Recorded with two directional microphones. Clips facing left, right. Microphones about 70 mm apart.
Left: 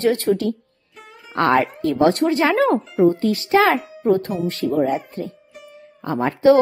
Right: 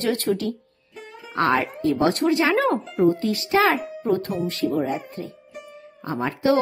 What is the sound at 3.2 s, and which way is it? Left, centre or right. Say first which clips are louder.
Speech: left 3 dB; left.